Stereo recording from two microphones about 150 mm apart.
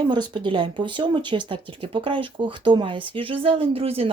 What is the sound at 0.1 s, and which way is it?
Speech, 30° right (ahead or behind).